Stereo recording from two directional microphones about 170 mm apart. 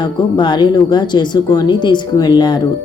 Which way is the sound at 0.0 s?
25° left (ahead or behind).